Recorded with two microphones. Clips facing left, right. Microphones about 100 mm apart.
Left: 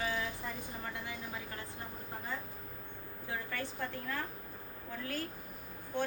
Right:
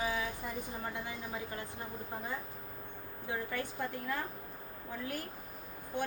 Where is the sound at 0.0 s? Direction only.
15° right (ahead or behind).